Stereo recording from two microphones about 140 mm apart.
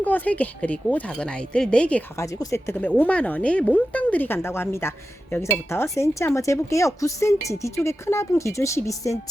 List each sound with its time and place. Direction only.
0.0 s speech: 10° left (ahead or behind)
2.1 s speech: 20° left (ahead or behind)